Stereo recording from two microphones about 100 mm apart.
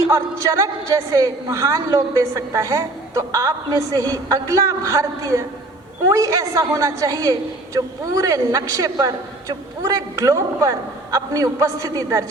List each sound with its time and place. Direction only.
0.0 s a woman's voice: 35° right (ahead or behind)